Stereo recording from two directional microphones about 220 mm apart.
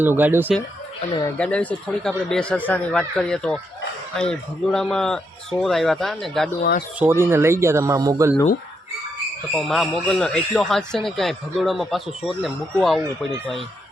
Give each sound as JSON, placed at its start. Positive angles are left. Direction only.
{"t": 0.0, "sound": "speech", "side_deg": -10}
{"t": 1.4, "sound": "speech", "side_deg": 5}
{"t": 6.6, "sound": "speech", "side_deg": 45}
{"t": 7.0, "sound": "speech", "side_deg": -10}
{"t": 9.6, "sound": "speech", "side_deg": 0}